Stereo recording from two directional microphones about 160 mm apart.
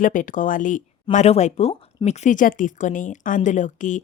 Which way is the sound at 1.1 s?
45° left (ahead or behind).